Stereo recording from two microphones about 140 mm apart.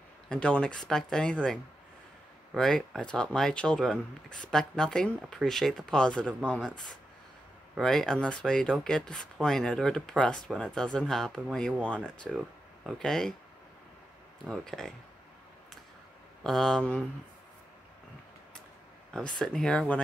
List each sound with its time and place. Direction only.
0.3 s speech: 5° left (ahead or behind)
7.7 s speech: 5° left (ahead or behind)
14.4 s speech: 5° left (ahead or behind)
16.4 s speech: centre (ahead or behind)
19.1 s speech: 5° left (ahead or behind)